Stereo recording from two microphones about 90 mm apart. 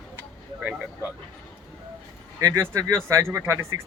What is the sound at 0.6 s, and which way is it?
Speech, 10° right (ahead or behind).